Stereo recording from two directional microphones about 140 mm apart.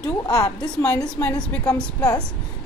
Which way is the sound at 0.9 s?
5° left (ahead or behind).